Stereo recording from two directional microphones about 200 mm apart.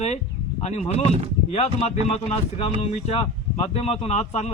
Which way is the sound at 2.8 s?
30° left (ahead or behind).